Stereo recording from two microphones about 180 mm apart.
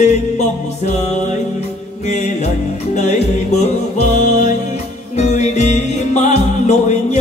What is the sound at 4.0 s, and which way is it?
Music, 40° left (ahead or behind).